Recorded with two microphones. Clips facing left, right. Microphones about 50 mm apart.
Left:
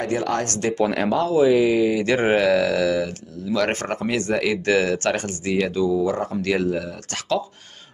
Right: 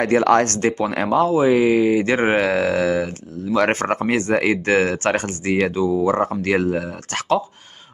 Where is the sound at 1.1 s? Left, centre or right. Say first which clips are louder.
Right 2 dB; right.